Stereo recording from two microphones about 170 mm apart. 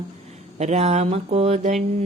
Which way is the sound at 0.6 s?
40° right (ahead or behind).